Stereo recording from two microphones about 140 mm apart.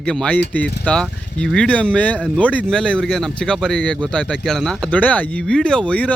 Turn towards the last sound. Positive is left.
turn(degrees=10)  # may be behind; listen again after turning